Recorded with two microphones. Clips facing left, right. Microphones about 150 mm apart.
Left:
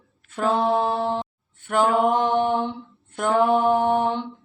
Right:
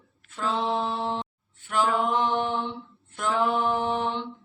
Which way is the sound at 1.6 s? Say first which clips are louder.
Left 5 dB; 55° left (ahead or behind).